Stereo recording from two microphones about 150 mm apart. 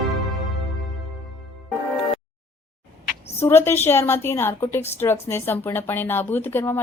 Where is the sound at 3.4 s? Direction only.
15° left (ahead or behind).